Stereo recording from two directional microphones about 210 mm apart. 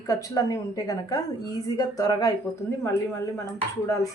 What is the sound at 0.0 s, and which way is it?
A woman's voice, 15° left (ahead or behind).